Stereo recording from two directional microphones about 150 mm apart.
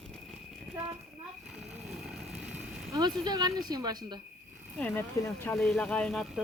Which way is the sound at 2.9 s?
25° right (ahead or behind).